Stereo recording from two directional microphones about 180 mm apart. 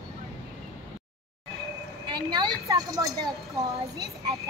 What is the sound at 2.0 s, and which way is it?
Speech, 25° right (ahead or behind).